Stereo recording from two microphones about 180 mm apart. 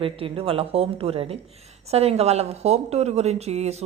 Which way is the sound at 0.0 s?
30° right (ahead or behind).